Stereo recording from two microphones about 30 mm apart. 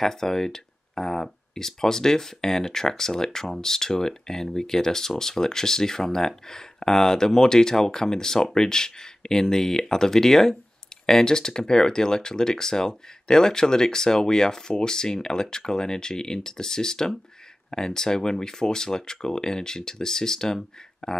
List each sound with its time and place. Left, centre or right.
0.0 s speech: centre